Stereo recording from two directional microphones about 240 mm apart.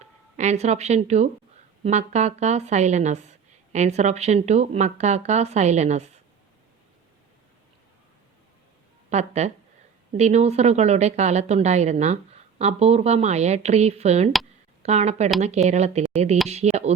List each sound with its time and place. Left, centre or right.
0.0 s a woman's voice: right
9.0 s a woman's voice: right